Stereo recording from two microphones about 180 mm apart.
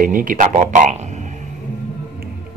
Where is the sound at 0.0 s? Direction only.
50° right (ahead or behind).